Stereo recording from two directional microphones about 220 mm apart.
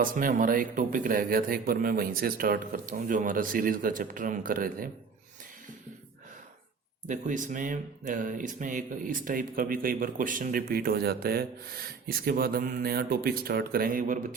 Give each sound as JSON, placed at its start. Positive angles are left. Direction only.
{"t": 0.0, "sound": "speech", "side_deg": -40}
{"t": 7.1, "sound": "speech", "side_deg": -35}